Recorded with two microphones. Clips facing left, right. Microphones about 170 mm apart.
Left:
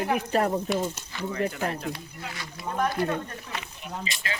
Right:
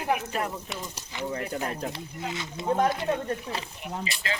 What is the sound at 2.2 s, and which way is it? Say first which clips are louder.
A woman's voice: right 6 dB; 20° right (ahead or behind).